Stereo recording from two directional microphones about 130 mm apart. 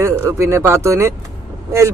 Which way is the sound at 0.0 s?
20° right (ahead or behind).